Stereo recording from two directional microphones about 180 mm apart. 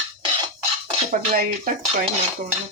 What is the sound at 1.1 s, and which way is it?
Speech, 50° right (ahead or behind).